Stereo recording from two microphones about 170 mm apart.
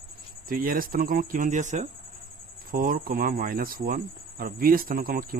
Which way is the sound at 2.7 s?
55° right (ahead or behind).